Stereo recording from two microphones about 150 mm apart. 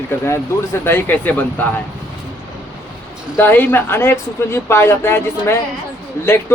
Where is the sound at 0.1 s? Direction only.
20° left (ahead or behind).